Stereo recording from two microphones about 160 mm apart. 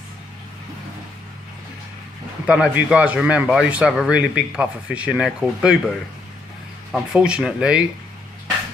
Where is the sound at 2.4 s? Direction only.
5° right (ahead or behind).